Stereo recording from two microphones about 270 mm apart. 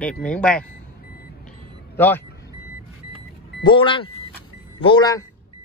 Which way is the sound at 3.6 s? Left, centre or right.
Centre.